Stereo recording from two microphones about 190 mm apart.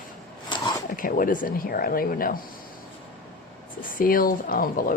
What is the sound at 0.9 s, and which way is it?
Speech, 45° left (ahead or behind).